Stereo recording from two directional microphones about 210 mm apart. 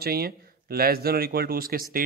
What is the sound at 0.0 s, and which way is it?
A man's voice, 45° right (ahead or behind).